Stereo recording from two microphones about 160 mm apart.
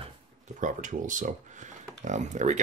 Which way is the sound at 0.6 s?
55° right (ahead or behind).